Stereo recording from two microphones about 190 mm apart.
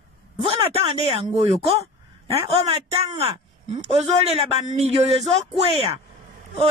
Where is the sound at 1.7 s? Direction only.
30° right (ahead or behind).